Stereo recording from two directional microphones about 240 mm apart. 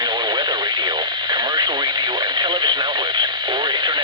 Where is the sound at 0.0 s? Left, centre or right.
Centre.